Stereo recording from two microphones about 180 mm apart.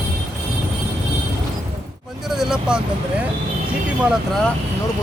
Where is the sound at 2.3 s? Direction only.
5° right (ahead or behind).